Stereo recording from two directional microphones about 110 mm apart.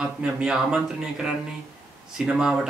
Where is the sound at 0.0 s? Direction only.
5° right (ahead or behind).